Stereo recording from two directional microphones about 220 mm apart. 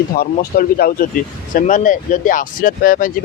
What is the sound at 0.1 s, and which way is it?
Speech, 45° left (ahead or behind).